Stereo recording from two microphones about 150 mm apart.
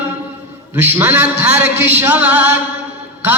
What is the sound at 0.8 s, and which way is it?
Music, 15° right (ahead or behind).